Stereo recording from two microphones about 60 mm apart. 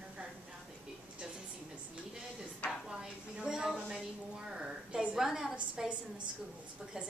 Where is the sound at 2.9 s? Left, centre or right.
Centre.